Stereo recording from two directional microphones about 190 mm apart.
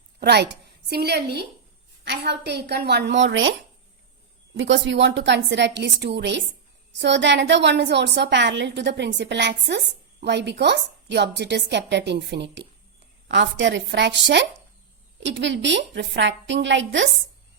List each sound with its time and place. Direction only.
0.2 s a woman's voice: 60° right (ahead or behind)
4.5 s a woman's voice: 75° right (ahead or behind)